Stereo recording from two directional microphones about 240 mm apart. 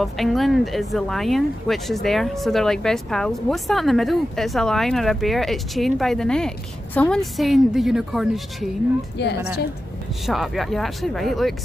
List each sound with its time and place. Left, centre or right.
0.0 s speech: centre
9.2 s a woman's voice: left
10.2 s speech: centre